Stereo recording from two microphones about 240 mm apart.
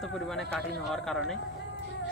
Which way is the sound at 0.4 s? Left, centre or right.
Centre.